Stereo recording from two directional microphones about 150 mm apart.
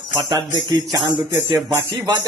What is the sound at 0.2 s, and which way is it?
Music, 25° right (ahead or behind).